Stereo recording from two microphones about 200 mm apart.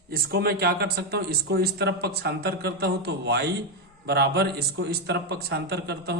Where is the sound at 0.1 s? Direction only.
50° right (ahead or behind).